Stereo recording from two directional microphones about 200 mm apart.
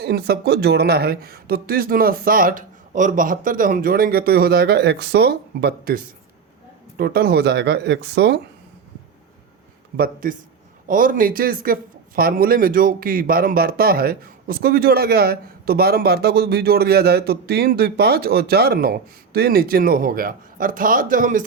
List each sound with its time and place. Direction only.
0.0 s speech: 55° right (ahead or behind)
10.0 s speech: 45° right (ahead or behind)